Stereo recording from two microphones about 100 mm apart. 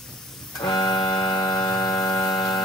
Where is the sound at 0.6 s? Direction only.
45° left (ahead or behind).